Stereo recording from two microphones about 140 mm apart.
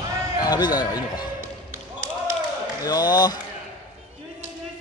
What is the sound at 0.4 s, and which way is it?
Speech, 30° left (ahead or behind).